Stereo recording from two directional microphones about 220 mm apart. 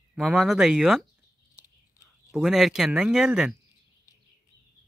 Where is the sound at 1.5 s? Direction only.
15° left (ahead or behind).